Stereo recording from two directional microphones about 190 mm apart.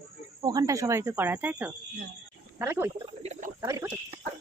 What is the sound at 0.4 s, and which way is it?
Speech, 20° right (ahead or behind).